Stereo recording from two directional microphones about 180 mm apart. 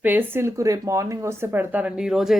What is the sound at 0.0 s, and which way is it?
Speech, 10° right (ahead or behind).